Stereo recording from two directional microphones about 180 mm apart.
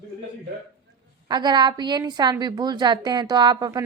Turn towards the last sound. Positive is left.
turn(degrees=-20)  # may be behind; listen again after turning